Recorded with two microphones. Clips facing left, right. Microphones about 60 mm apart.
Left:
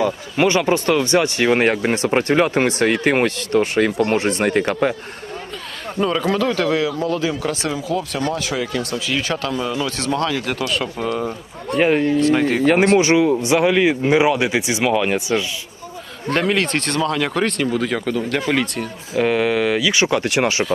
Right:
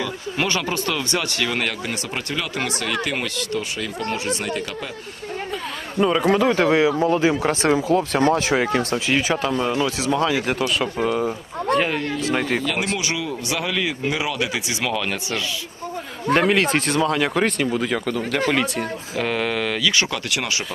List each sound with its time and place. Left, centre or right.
0.3 s speech: left
6.0 s speech: centre; by 9.2 s right
9.2 s speech: centre
10.0 s speech: centre
11.8 s speech: centre
12.2 s speech: centre
13.0 s speech: left
16.3 s speech: centre; by 20.7 s left